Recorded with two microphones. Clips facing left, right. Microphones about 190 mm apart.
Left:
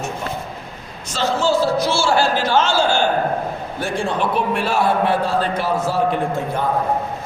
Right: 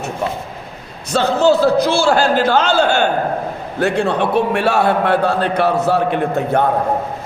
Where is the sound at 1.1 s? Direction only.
60° right (ahead or behind).